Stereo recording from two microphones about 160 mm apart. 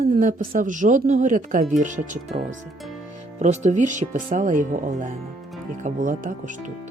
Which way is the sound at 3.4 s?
45° right (ahead or behind).